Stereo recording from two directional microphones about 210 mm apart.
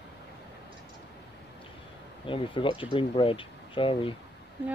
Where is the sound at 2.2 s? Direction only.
25° left (ahead or behind).